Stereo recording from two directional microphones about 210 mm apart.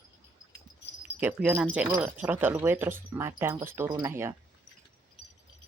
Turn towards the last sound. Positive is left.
turn(degrees=-10)  # may be behind; listen again after turning